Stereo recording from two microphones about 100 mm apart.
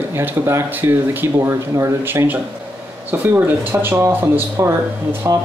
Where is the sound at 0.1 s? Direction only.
20° right (ahead or behind).